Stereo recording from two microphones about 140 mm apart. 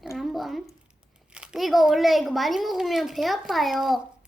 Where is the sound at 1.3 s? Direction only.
5° right (ahead or behind).